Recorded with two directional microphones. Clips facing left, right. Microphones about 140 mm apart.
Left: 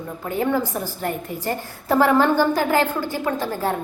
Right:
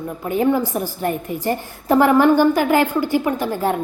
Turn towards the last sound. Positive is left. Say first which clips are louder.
# right 3 dB
turn(degrees=-15)  # may be behind; listen again after turning